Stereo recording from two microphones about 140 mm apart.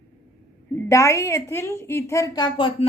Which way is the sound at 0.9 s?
20° left (ahead or behind).